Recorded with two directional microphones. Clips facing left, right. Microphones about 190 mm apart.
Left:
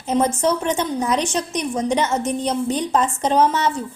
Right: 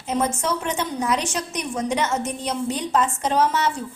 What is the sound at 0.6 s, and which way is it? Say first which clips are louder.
A woman's voice: left 4 dB; 35° left (ahead or behind).